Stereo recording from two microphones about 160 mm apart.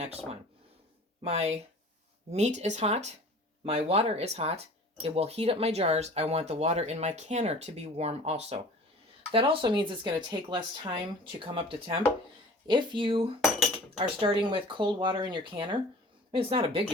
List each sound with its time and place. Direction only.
0.0 s speech: 40° right (ahead or behind)